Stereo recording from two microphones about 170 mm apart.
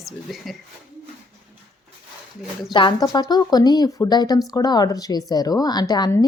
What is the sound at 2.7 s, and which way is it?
A woman's voice, 30° left (ahead or behind).